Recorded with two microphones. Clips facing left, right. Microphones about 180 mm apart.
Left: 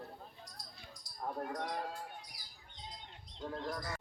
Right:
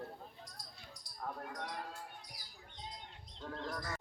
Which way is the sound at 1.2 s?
30° left (ahead or behind).